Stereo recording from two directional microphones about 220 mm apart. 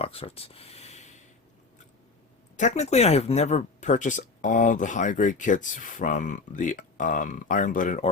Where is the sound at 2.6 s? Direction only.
30° left (ahead or behind).